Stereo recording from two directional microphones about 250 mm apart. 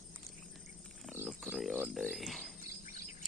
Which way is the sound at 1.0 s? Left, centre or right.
Centre.